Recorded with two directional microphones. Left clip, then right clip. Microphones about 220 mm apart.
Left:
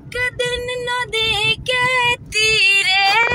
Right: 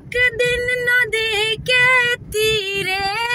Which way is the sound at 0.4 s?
15° right (ahead or behind).